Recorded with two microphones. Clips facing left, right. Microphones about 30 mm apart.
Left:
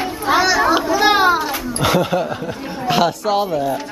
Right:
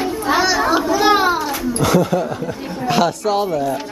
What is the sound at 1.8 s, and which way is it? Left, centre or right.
Speech, left.